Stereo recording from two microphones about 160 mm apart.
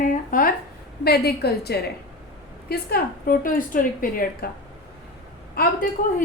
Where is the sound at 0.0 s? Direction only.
55° left (ahead or behind).